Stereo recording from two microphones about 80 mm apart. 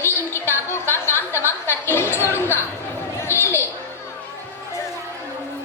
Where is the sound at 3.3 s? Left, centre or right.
Left.